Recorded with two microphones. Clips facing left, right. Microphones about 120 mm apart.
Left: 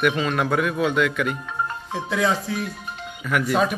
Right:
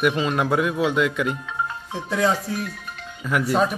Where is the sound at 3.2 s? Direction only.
25° right (ahead or behind).